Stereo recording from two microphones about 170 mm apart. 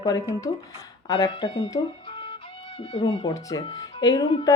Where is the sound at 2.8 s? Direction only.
35° left (ahead or behind).